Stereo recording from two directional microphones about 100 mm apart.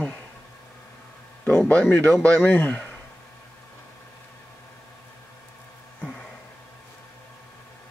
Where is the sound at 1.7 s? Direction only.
15° left (ahead or behind).